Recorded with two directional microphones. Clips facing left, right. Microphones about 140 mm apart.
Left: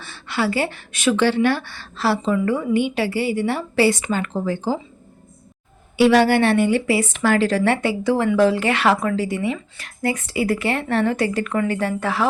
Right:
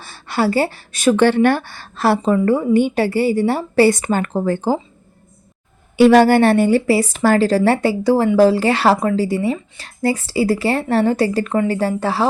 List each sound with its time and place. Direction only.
0.0 s a woman's voice: 40° right (ahead or behind)
6.0 s a woman's voice: 45° right (ahead or behind)